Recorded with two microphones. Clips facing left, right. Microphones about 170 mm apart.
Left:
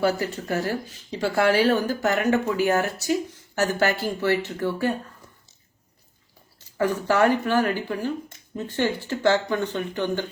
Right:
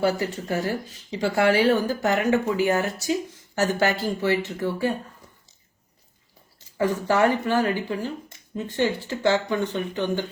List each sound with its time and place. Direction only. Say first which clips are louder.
0.2 s speech: even; 15° right (ahead or behind)
6.7 s speech: even; 20° right (ahead or behind)